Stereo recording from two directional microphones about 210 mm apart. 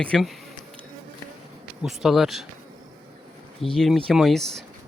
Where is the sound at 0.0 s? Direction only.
Centre (ahead or behind).